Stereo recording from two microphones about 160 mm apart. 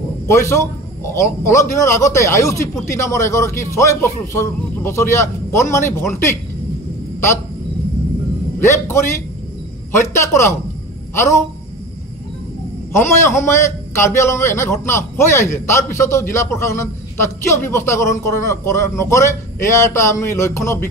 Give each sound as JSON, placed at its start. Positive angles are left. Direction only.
{"t": 0.3, "sound": "a man's voice", "side_deg": 20}
{"t": 8.5, "sound": "a man's voice", "side_deg": 15}
{"t": 12.9, "sound": "a man's voice", "side_deg": 15}